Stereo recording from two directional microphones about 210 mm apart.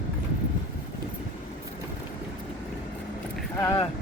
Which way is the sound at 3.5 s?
20° left (ahead or behind).